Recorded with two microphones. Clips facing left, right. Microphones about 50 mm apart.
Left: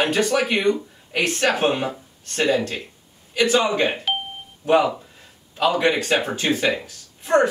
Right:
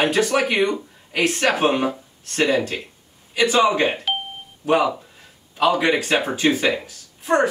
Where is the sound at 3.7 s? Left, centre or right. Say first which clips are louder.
Right 1 dB; centre.